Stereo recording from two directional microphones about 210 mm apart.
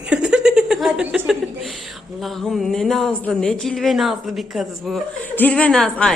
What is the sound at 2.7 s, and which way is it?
A woman's voice, centre (ahead or behind).